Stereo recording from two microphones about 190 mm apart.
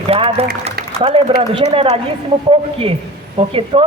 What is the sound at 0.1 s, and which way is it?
A man's voice, 30° right (ahead or behind).